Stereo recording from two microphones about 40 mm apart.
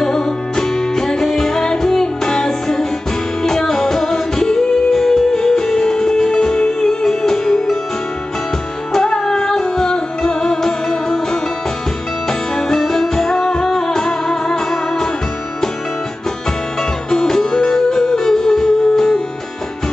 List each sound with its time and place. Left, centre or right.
0.0 s music: centre
8.9 s music: centre
12.3 s music: centre
17.1 s music: centre